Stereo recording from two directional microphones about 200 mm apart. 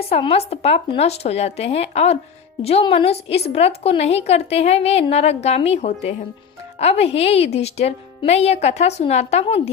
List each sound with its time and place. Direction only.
0.1 s a woman's voice: 30° left (ahead or behind)